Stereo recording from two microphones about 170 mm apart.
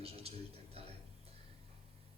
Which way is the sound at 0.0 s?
35° right (ahead or behind).